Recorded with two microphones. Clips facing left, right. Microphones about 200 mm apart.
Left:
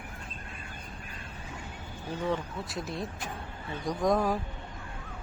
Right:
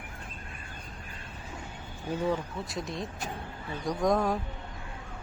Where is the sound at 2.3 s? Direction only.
Centre (ahead or behind).